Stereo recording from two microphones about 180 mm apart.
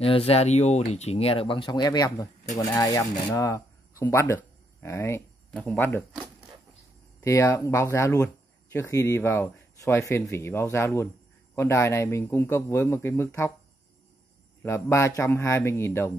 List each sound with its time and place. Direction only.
0.0 s speech: 35° left (ahead or behind); by 6.0 s 15° left (ahead or behind)
7.2 s speech: 15° left (ahead or behind)
14.6 s speech: 15° left (ahead or behind)